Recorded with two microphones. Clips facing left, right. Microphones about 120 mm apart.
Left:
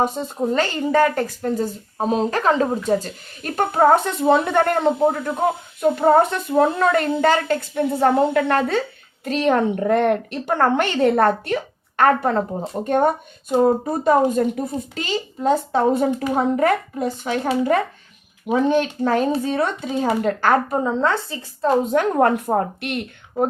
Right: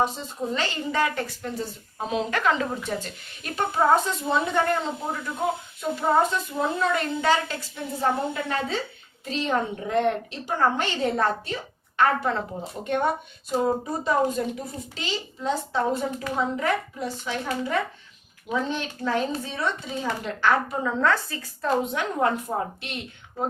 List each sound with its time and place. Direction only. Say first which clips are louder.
0.0 s a woman's voice: left 5 dB; 50° left (ahead or behind)
20.8 s a woman's voice: left 3 dB; 25° left (ahead or behind)
21.9 s a woman's voice: left 8 dB; 50° left (ahead or behind)